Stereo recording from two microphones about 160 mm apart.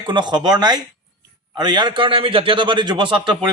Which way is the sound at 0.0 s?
30° right (ahead or behind).